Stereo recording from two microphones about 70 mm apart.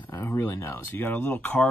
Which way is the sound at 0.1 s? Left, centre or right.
Left.